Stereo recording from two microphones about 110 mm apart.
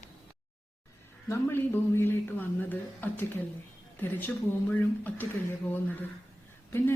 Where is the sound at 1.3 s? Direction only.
20° left (ahead or behind).